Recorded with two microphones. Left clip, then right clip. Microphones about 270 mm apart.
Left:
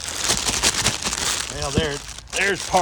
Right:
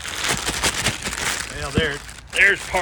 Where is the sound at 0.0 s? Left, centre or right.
Centre.